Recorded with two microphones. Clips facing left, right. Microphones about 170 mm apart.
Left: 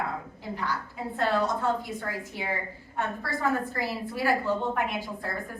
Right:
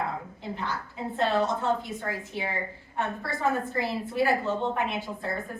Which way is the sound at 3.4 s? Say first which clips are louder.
Right 1 dB; 20° right (ahead or behind).